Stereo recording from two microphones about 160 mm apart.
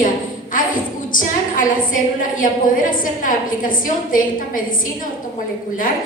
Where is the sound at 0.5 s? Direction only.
55° left (ahead or behind).